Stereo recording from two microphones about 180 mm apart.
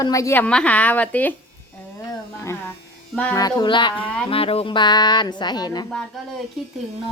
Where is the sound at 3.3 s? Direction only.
25° left (ahead or behind).